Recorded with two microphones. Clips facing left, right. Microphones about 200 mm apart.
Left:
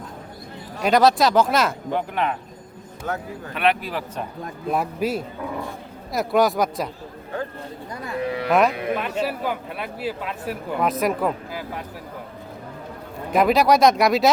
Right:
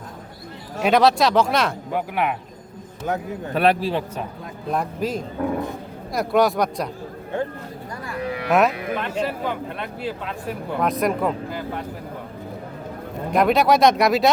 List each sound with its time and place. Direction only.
0.8 s a man's voice: centre (ahead or behind); by 3.2 s 15° right (ahead or behind)
3.5 s a man's voice: 35° right (ahead or behind)
4.7 s speech: 5° left (ahead or behind)
7.3 s speech: 25° right (ahead or behind)
8.4 s speech: centre (ahead or behind)
13.3 s speech: centre (ahead or behind)